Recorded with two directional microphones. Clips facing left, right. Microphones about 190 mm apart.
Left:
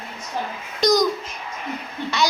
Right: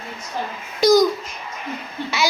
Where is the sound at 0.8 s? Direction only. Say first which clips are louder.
Right 4 dB; 5° right (ahead or behind).